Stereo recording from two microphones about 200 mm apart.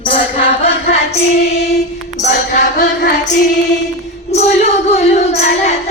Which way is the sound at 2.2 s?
40° left (ahead or behind).